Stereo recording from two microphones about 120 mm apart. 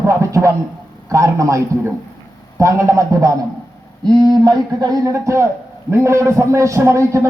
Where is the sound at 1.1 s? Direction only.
25° right (ahead or behind).